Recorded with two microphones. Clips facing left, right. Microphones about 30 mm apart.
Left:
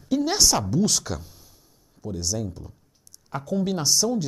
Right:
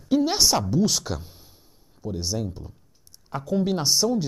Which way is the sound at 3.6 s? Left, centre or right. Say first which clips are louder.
Even; right.